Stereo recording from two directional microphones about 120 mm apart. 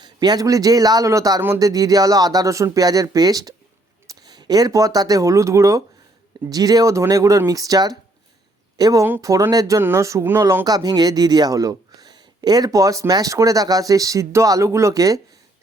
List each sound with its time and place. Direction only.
0.0 s speech: 35° right (ahead or behind)
10.7 s speech: 35° right (ahead or behind)